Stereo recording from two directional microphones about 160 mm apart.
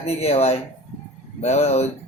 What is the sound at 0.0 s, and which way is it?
Speech, 40° left (ahead or behind).